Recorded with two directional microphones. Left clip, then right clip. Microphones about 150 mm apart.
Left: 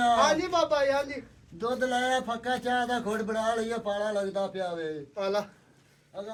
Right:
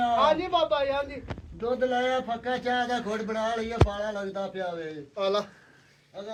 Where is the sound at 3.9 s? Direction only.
15° right (ahead or behind).